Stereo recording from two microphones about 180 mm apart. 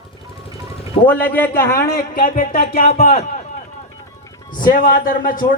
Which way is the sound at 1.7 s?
50° left (ahead or behind).